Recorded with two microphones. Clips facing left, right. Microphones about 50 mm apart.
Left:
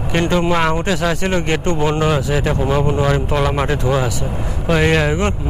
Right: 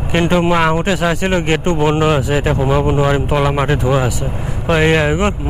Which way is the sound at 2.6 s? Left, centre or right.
Centre.